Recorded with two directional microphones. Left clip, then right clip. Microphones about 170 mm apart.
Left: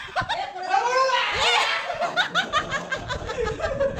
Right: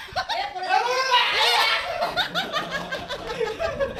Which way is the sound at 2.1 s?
10° right (ahead or behind).